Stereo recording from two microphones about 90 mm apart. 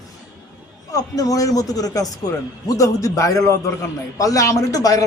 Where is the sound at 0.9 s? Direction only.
40° left (ahead or behind).